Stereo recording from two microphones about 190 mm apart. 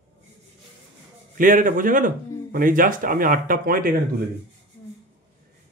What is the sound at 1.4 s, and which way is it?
Speech, 45° right (ahead or behind).